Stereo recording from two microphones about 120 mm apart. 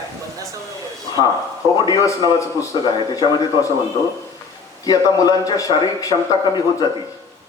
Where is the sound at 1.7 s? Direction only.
35° left (ahead or behind).